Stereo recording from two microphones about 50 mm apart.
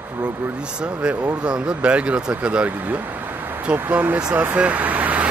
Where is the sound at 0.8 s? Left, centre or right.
Centre.